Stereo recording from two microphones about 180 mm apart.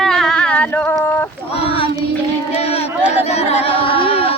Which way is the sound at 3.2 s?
35° left (ahead or behind).